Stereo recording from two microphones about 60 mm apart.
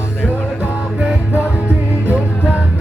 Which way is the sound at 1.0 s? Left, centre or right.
Right.